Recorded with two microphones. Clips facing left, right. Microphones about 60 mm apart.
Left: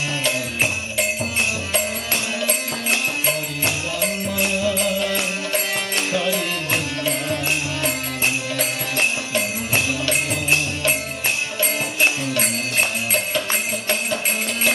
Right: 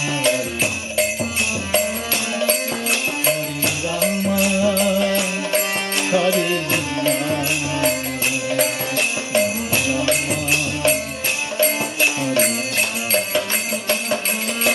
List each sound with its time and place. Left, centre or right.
4.6 s music: centre
6.1 s music: centre